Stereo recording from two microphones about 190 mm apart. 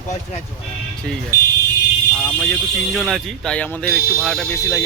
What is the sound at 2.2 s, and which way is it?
Speech, 5° left (ahead or behind).